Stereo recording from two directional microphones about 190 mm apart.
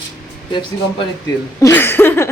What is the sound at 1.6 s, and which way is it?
Speech, 15° left (ahead or behind).